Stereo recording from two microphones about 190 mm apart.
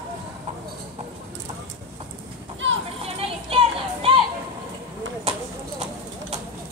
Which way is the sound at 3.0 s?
30° right (ahead or behind).